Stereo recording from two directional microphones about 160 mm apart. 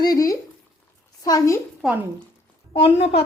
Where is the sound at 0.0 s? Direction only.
20° left (ahead or behind).